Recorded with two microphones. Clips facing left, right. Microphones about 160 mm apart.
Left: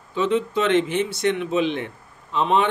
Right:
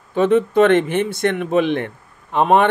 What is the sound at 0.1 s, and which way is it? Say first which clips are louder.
Speech: right 6 dB; 55° right (ahead or behind).